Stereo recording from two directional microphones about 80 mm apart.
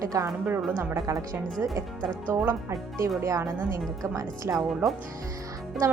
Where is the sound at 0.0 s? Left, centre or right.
Right.